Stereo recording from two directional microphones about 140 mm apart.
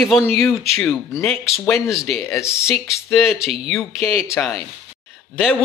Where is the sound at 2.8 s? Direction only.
Centre (ahead or behind).